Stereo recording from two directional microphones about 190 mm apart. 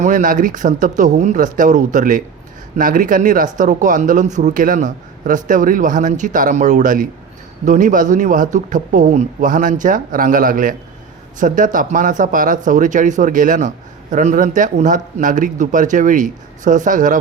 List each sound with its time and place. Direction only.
0.0 s speech: 45° right (ahead or behind)